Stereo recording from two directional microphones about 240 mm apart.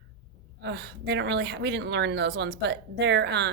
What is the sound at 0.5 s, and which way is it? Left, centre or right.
A woman's voice, right.